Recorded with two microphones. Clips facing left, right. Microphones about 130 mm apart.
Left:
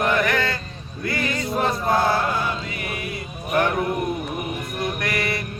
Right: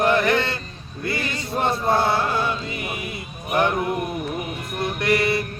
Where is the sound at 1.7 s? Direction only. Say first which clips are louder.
Right 1 dB; 30° right (ahead or behind).